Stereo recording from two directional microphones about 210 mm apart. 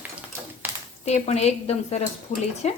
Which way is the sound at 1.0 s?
30° left (ahead or behind).